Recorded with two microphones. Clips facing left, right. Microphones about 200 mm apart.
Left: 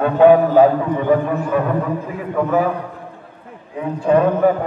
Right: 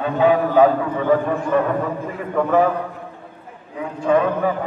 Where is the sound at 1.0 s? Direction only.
10° left (ahead or behind).